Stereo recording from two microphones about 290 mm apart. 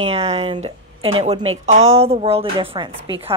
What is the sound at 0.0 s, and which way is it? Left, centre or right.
A woman's voice, right.